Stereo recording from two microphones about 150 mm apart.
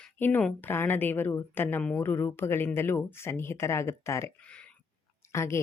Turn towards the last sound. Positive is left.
turn(degrees=20)  # may be behind; listen again after turning